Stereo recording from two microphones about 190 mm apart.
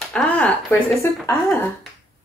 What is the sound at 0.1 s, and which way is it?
Speech, 5° left (ahead or behind).